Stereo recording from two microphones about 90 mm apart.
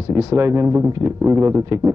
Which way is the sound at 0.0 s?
40° right (ahead or behind).